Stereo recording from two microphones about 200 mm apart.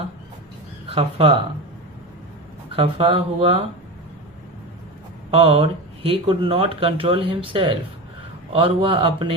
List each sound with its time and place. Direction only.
0.9 s speech: 25° right (ahead or behind)
2.7 s speech: 25° right (ahead or behind)
5.3 s speech: 30° right (ahead or behind)